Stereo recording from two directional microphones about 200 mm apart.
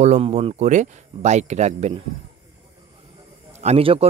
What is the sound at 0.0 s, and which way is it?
Speech, 35° right (ahead or behind).